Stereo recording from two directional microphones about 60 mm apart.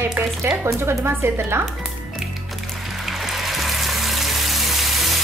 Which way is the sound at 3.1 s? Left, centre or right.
Centre.